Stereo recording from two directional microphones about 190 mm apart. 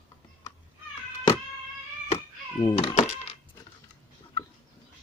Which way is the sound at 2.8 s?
35° left (ahead or behind).